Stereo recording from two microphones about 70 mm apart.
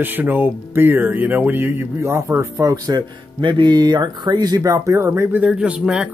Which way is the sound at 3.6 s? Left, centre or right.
Right.